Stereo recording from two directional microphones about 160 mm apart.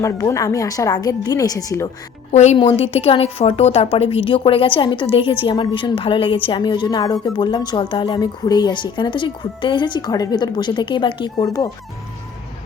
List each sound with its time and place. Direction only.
0.0 s a woman's voice: 20° left (ahead or behind)
2.3 s a woman's voice: 45° left (ahead or behind)
2.6 s a woman's voice: 35° left (ahead or behind)